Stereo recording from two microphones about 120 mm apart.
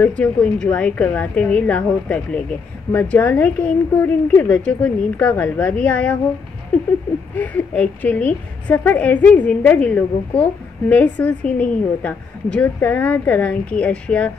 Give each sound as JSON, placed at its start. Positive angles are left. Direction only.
{"t": 0.0, "sound": "a woman's voice", "side_deg": 10}
{"t": 7.3, "sound": "a woman's voice", "side_deg": 10}